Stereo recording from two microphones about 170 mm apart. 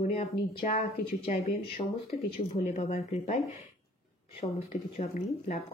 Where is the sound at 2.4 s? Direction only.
35° left (ahead or behind).